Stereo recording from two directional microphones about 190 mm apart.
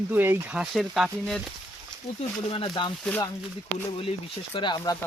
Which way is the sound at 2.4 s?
25° left (ahead or behind).